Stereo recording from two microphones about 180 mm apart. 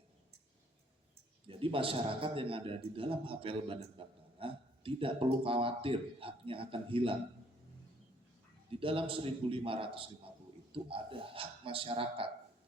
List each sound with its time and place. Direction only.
1.5 s a man's voice: 30° right (ahead or behind)
8.7 s a man's voice: 30° right (ahead or behind)